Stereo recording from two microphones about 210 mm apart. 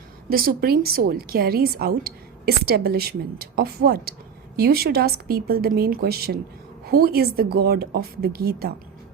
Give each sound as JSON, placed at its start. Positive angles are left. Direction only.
{"t": 0.3, "sound": "a woman's voice", "side_deg": -45}